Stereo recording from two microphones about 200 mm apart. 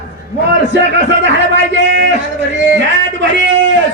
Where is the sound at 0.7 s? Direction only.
65° right (ahead or behind).